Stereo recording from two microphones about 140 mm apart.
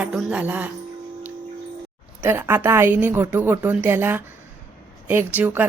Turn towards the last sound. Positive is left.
turn(degrees=-15)  # may be behind; listen again after turning